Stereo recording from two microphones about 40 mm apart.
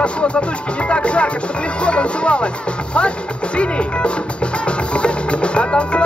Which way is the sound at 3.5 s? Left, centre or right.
Left.